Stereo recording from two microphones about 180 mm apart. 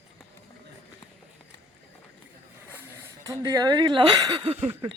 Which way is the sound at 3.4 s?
20° right (ahead or behind).